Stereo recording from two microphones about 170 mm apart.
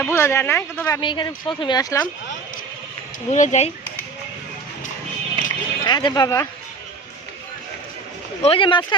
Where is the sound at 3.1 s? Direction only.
45° left (ahead or behind).